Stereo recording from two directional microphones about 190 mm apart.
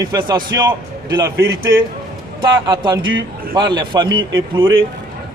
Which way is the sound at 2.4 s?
25° right (ahead or behind).